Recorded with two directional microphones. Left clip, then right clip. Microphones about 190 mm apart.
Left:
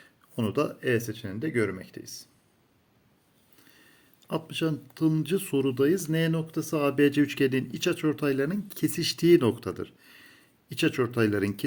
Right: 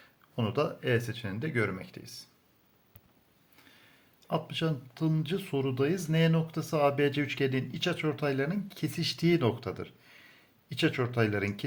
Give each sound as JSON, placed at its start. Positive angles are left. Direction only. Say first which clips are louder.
{"t": 0.3, "sound": "speech", "louder": "left 2 dB", "side_deg": 35}
{"t": 4.2, "sound": "speech", "louder": "left 2 dB", "side_deg": 30}